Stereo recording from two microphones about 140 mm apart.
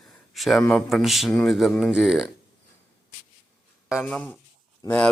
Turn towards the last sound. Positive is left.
turn(degrees=25)  # may be behind; listen again after turning